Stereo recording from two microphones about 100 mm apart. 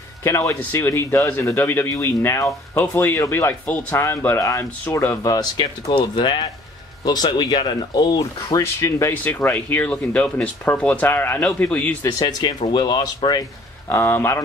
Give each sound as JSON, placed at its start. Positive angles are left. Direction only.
{"t": 0.2, "sound": "speech", "side_deg": 30}
{"t": 9.1, "sound": "speech", "side_deg": 15}
{"t": 12.0, "sound": "speech", "side_deg": 45}
{"t": 13.8, "sound": "speech", "side_deg": 25}